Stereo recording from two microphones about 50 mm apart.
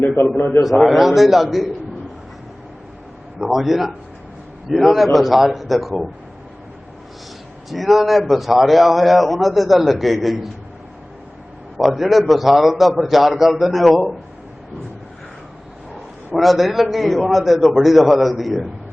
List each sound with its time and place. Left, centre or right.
0.3 s a man's voice: left
0.6 s a man's voice: centre
3.4 s a man's voice: centre
7.7 s a man's voice: centre
11.8 s a man's voice: centre
16.3 s a man's voice: centre